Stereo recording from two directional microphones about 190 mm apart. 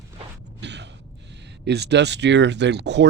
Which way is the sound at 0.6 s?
65° right (ahead or behind).